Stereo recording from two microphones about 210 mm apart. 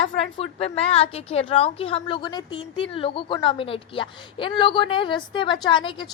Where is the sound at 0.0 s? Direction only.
25° left (ahead or behind).